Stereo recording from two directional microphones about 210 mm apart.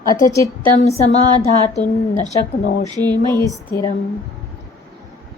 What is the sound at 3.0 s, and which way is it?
Speech, 20° right (ahead or behind).